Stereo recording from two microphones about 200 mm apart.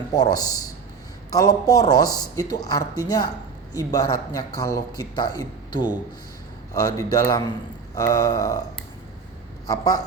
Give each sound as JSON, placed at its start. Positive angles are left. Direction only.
{"t": 0.1, "sound": "speech", "side_deg": 20}
{"t": 6.9, "sound": "grunt", "side_deg": 15}
{"t": 9.6, "sound": "grunt", "side_deg": 20}